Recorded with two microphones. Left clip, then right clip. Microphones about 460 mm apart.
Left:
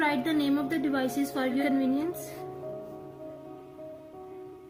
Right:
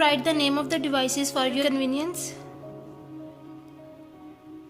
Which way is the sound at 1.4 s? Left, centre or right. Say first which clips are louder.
Right 5 dB; right.